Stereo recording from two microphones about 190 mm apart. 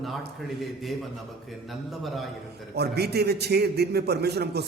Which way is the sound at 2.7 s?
60° right (ahead or behind).